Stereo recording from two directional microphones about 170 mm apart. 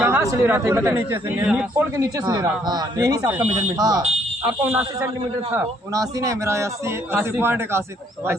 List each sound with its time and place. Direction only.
0.0 s a man's voice: 15° right (ahead or behind)
2.0 s speech: 20° right (ahead or behind)
5.5 s a man's voice: 20° right (ahead or behind)